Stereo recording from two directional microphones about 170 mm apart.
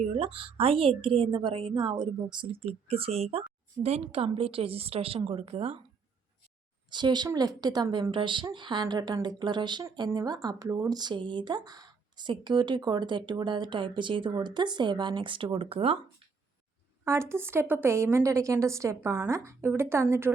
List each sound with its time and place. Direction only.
0.0 s a woman's voice: 35° right (ahead or behind)
6.9 s a woman's voice: 25° right (ahead or behind)
17.0 s a woman's voice: 15° right (ahead or behind)